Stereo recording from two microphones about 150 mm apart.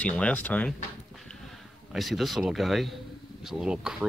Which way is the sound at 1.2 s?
Centre (ahead or behind).